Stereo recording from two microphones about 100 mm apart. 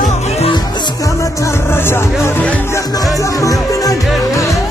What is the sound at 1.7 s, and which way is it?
Speech, 25° left (ahead or behind).